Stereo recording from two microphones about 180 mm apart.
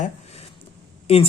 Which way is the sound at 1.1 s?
35° left (ahead or behind).